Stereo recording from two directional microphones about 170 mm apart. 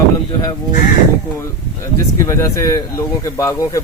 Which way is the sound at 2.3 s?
20° left (ahead or behind).